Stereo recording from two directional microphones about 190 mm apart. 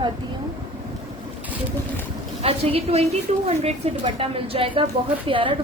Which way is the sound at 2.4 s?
30° right (ahead or behind).